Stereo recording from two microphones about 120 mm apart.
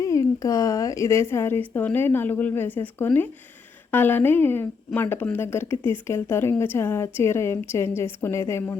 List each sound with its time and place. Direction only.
0.0 s a woman's voice: 25° left (ahead or behind)